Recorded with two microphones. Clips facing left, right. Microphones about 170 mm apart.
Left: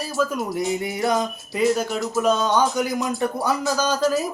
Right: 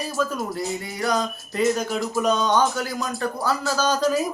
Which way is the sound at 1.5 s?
5° left (ahead or behind).